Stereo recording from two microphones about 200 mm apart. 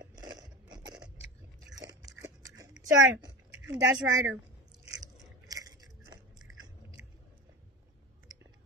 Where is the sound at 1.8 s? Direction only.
20° right (ahead or behind).